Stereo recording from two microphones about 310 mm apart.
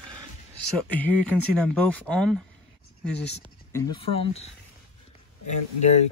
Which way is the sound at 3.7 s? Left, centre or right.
Centre.